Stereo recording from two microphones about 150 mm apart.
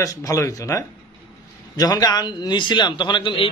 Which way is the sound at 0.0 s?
20° left (ahead or behind).